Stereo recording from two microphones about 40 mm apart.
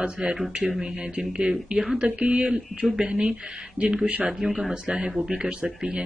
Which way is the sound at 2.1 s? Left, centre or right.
Right.